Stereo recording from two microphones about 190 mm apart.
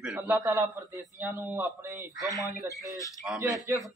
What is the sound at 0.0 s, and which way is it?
Speech, 5° right (ahead or behind).